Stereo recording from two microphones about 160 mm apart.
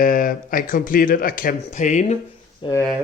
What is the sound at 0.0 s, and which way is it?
Speech, 60° left (ahead or behind).